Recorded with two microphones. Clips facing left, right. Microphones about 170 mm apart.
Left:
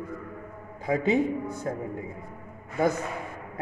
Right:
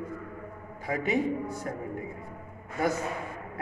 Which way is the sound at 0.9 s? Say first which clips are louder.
Left 4 dB; 25° left (ahead or behind).